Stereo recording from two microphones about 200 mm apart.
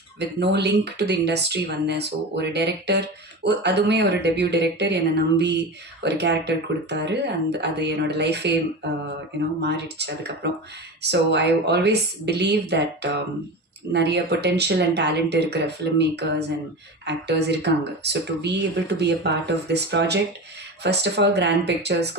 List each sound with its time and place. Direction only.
0.2 s speech: 55° right (ahead or behind)